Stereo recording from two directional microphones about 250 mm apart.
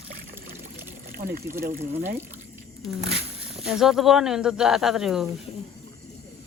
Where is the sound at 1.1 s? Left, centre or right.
Right.